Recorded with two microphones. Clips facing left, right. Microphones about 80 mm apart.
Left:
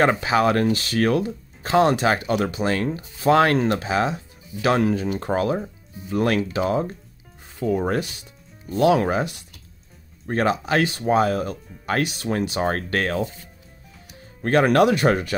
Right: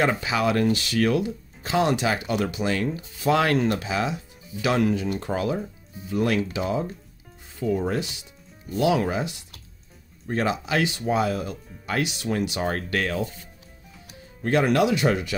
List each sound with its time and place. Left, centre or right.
0.0 s speech: left
14.4 s speech: left